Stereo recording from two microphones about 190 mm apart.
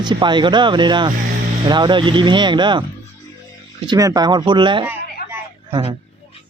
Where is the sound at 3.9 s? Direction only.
20° right (ahead or behind).